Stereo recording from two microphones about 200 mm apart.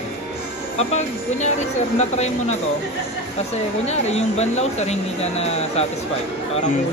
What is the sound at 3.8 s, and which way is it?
Speech, 35° left (ahead or behind).